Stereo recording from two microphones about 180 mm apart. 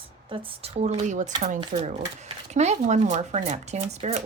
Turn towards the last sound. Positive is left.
turn(degrees=-40)  # may be behind; listen again after turning